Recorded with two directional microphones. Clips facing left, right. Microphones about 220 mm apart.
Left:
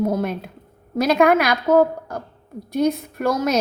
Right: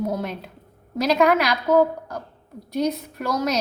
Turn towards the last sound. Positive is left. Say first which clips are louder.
# left 4 dB
turn(degrees=50)  # may be behind; listen again after turning